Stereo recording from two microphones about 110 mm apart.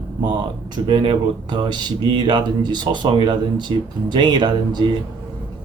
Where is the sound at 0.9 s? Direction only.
50° right (ahead or behind).